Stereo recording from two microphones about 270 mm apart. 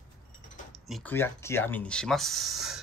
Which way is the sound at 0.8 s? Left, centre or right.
Centre.